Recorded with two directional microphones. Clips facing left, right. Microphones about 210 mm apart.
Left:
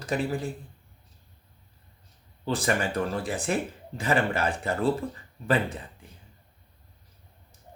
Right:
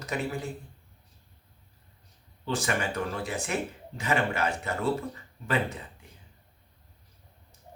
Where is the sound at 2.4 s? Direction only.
35° left (ahead or behind).